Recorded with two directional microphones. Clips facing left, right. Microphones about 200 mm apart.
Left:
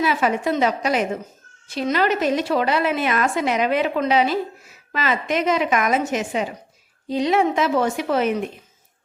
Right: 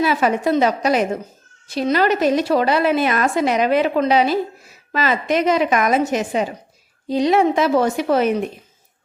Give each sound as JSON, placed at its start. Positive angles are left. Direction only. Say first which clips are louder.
{"t": 0.0, "sound": "a woman's voice", "louder": "right 3 dB", "side_deg": -40}